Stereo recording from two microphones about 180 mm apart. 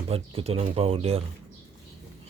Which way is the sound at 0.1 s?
35° right (ahead or behind).